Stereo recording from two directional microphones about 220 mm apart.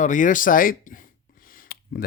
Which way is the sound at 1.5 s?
40° left (ahead or behind).